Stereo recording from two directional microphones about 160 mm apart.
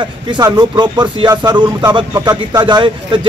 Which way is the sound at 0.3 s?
30° right (ahead or behind).